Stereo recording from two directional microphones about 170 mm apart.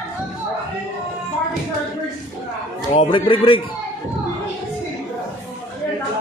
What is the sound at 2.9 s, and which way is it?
Speech, 30° left (ahead or behind).